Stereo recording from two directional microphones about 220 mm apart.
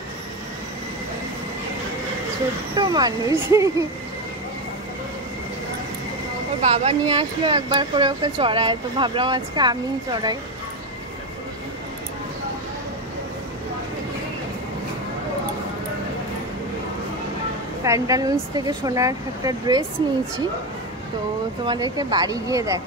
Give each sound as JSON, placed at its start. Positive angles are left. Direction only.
{"t": 2.7, "sound": "speech", "side_deg": -20}
{"t": 6.6, "sound": "speech", "side_deg": -30}
{"t": 17.8, "sound": "speech", "side_deg": -15}
{"t": 21.6, "sound": "speech", "side_deg": -20}